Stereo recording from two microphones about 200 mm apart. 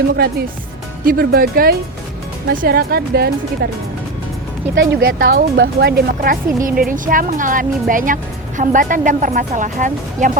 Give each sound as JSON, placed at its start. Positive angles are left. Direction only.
{"t": 1.0, "sound": "speech", "side_deg": -50}
{"t": 4.7, "sound": "a woman's voice", "side_deg": -60}